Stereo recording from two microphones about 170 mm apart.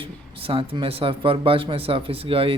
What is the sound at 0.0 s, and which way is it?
Speech, 30° right (ahead or behind).